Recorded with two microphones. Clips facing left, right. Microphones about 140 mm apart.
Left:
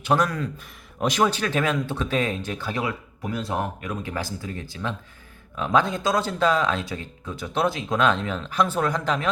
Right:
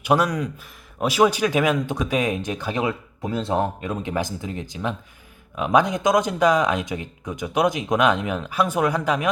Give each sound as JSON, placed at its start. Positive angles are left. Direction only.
{"t": 0.0, "sound": "speech", "side_deg": -10}